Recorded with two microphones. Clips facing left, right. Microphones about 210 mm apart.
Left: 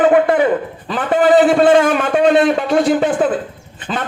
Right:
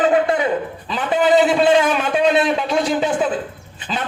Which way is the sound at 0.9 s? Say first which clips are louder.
Left 4 dB; 50° left (ahead or behind).